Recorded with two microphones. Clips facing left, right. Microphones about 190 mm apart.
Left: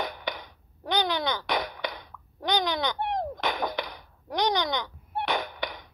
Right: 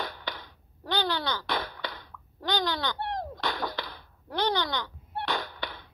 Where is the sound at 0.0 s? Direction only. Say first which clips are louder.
Left 4 dB; 15° left (ahead or behind).